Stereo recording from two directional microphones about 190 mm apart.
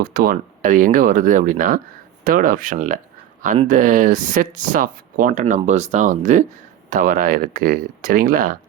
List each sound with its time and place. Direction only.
0.0 s speech: 50° right (ahead or behind)